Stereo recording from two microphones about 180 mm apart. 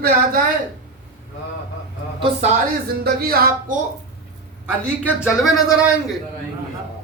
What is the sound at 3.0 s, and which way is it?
Speech, 60° right (ahead or behind).